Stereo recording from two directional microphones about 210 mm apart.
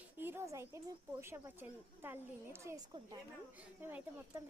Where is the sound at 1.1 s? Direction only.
10° right (ahead or behind).